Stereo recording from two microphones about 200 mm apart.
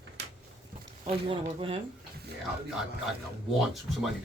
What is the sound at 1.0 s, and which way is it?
Speech, 30° right (ahead or behind).